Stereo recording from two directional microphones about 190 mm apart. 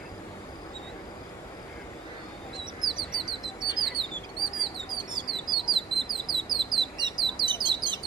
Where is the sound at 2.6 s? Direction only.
25° right (ahead or behind).